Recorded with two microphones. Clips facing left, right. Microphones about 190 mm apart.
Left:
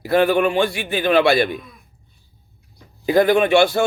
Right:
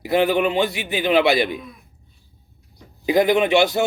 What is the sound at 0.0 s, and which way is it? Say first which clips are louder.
A man's voice: left 2 dB; 15° right (ahead or behind).